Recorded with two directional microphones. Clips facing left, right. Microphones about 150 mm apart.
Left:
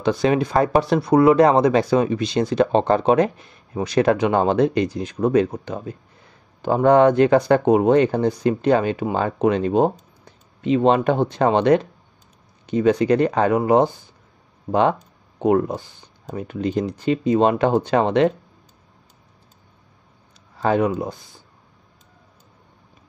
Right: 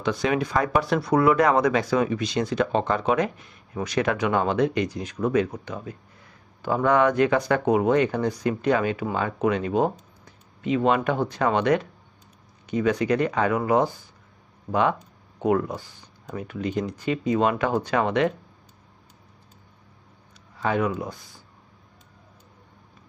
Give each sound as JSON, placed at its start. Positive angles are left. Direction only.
{"t": 0.0, "sound": "speech", "side_deg": 30}
{"t": 20.5, "sound": "speech", "side_deg": 35}